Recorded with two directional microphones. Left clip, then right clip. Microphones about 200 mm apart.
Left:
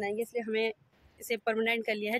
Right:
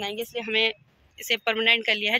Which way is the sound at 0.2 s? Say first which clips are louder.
Right 11 dB; 10° left (ahead or behind).